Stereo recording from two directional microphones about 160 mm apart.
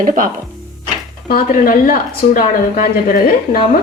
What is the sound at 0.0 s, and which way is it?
Speech, 60° right (ahead or behind).